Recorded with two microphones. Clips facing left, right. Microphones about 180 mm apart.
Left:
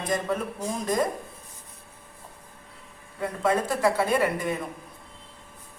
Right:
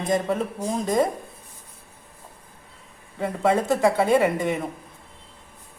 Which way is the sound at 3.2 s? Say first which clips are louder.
Right 3 dB; 25° right (ahead or behind).